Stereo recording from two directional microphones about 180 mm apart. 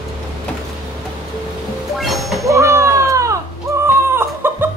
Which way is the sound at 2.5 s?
15° right (ahead or behind).